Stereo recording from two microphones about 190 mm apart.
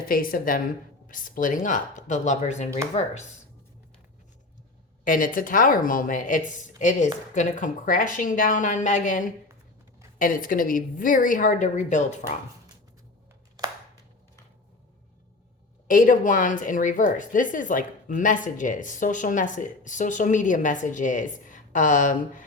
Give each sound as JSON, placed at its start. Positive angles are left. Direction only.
{"t": 0.0, "sound": "speech", "side_deg": 50}
{"t": 5.0, "sound": "speech", "side_deg": 45}
{"t": 15.9, "sound": "speech", "side_deg": 45}